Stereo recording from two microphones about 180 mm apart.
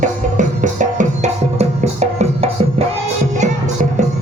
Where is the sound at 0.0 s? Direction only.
45° right (ahead or behind).